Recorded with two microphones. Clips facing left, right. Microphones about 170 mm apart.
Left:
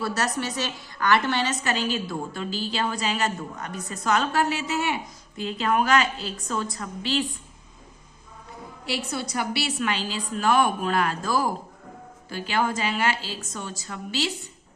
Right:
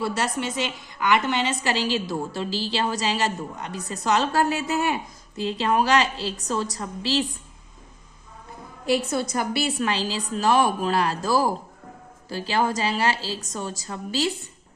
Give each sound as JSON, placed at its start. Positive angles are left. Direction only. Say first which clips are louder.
{"t": 0.0, "sound": "a woman's voice", "louder": "right 1 dB", "side_deg": -25}
{"t": 1.6, "sound": "a woman's voice", "louder": "right 2 dB", "side_deg": -30}
{"t": 9.3, "sound": "a woman's voice", "louder": "right 3 dB", "side_deg": -45}